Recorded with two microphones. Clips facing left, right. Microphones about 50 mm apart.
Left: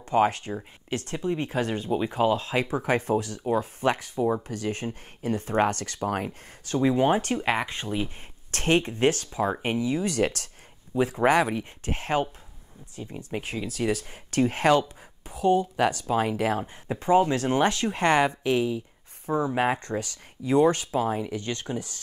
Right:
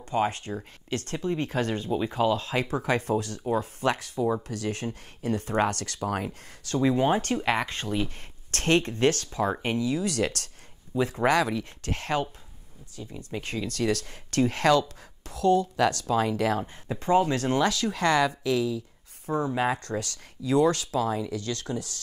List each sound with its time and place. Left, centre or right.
0.0 s speech: left
6.0 s speech: left
6.7 s speech: left
13.4 s speech: centre; by 18.8 s left
19.2 s speech: left
19.5 s speech: left
19.8 s speech: left